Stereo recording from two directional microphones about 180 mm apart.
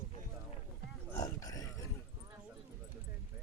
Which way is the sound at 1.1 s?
20° left (ahead or behind).